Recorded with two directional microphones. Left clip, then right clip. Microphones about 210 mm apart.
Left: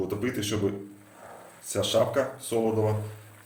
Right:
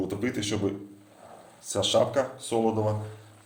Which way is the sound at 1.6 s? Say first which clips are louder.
Right 1 dB; centre (ahead or behind).